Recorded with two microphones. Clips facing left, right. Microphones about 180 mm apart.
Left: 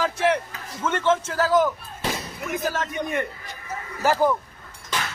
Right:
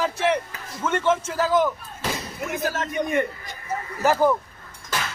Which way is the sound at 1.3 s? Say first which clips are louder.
Left 1 dB; 5° left (ahead or behind).